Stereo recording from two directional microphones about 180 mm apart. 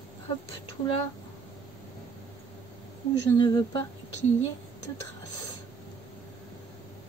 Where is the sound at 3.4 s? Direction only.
20° left (ahead or behind).